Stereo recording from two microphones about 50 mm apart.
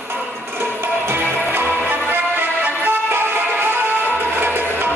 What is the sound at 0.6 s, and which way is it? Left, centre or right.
Music, right.